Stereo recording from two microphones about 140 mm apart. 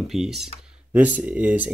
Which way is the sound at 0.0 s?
5° right (ahead or behind).